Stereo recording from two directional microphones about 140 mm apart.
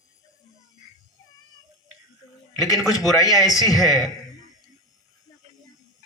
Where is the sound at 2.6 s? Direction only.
25° left (ahead or behind).